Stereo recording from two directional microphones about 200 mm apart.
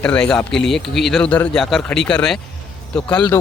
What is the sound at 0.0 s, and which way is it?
Speech, 5° left (ahead or behind).